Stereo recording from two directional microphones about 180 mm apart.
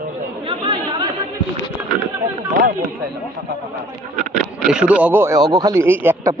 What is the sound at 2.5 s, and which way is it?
Speech, 50° right (ahead or behind).